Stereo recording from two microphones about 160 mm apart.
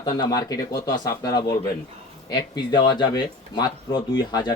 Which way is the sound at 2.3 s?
25° left (ahead or behind).